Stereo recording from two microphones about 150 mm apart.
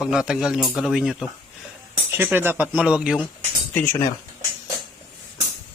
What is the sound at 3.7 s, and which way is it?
Speech, 10° left (ahead or behind).